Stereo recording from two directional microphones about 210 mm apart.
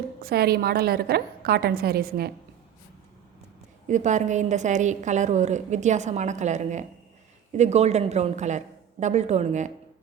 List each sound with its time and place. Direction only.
0.2 s a woman's voice: 45° right (ahead or behind)
3.8 s a woman's voice: 35° right (ahead or behind)